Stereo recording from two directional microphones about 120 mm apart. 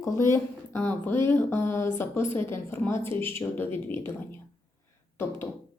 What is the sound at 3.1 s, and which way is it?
Speech, 50° right (ahead or behind).